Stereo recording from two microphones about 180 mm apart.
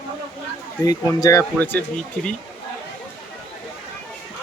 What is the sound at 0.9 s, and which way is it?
Speech, 20° left (ahead or behind).